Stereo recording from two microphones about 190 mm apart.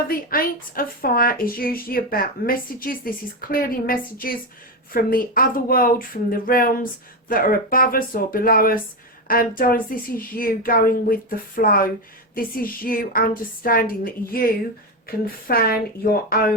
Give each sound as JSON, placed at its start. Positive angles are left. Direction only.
{"t": 0.1, "sound": "speech", "side_deg": 50}